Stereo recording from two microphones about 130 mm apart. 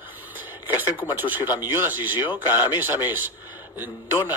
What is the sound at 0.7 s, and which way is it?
A man's voice, 15° right (ahead or behind).